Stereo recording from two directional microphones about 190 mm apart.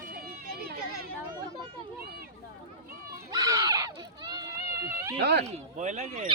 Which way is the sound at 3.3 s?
20° right (ahead or behind).